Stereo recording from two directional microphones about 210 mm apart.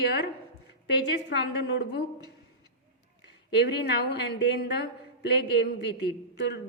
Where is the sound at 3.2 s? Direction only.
55° left (ahead or behind).